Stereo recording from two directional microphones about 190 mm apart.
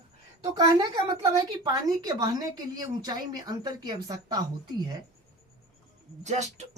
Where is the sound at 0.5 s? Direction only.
20° right (ahead or behind).